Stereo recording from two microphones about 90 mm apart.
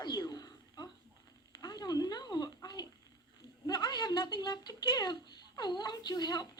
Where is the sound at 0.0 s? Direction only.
50° left (ahead or behind).